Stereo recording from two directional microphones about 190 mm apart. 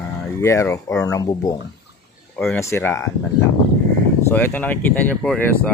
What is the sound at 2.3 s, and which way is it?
Speech, 10° left (ahead or behind).